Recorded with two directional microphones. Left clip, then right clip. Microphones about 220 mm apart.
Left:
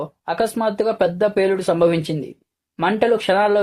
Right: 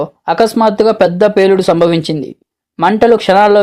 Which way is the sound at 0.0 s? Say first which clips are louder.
Right 10 dB; 35° right (ahead or behind).